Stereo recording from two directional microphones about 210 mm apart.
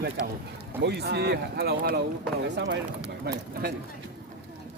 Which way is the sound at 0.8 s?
50° right (ahead or behind).